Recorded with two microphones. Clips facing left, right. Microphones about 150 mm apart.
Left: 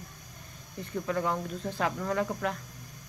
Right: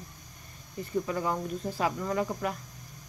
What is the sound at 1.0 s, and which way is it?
Speech, 5° right (ahead or behind).